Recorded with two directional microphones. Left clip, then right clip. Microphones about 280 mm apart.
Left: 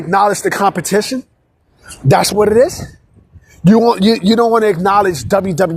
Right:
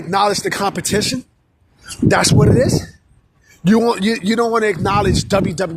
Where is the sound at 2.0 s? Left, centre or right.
Centre.